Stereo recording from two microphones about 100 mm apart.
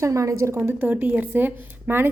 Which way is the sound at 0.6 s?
20° right (ahead or behind).